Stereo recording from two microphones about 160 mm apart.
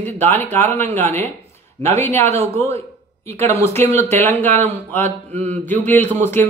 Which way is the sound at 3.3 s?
15° left (ahead or behind).